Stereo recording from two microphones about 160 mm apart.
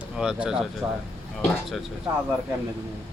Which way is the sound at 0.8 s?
20° right (ahead or behind).